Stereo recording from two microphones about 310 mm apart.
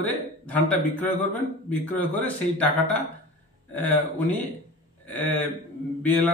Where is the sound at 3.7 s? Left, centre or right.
Centre.